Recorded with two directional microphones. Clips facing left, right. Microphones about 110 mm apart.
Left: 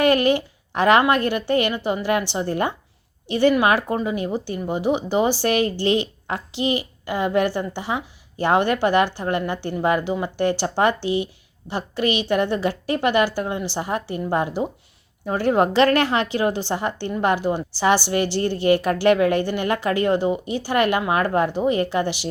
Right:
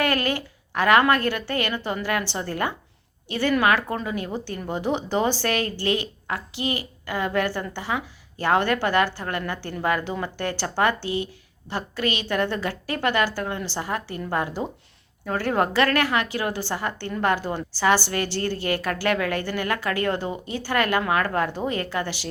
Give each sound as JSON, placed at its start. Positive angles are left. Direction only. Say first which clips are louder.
{"t": 0.0, "sound": "a woman's voice", "louder": "left 7 dB", "side_deg": 20}